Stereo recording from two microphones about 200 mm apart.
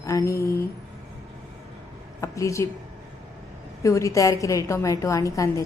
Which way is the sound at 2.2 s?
15° left (ahead or behind).